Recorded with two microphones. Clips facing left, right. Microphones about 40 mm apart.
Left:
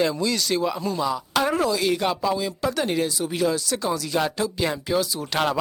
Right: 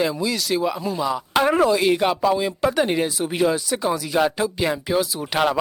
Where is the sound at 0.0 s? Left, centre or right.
Centre.